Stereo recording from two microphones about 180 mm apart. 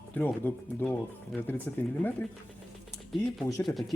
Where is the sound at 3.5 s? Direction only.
20° left (ahead or behind).